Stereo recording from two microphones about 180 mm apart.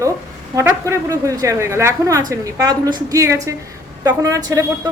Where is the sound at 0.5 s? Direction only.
15° right (ahead or behind).